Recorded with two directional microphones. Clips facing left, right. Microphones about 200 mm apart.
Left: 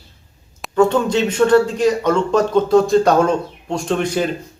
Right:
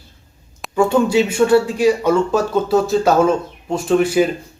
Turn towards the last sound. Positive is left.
turn(degrees=-5)  # may be behind; listen again after turning